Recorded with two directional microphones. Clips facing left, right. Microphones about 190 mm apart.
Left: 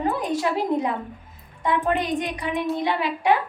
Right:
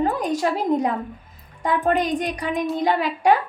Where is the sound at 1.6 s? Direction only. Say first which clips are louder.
Right 2 dB; 40° right (ahead or behind).